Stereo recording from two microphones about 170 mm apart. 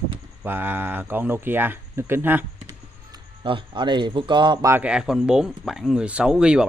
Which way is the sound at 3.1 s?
30° right (ahead or behind).